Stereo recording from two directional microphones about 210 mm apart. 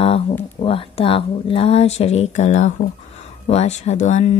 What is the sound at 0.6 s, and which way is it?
Speech, 25° left (ahead or behind).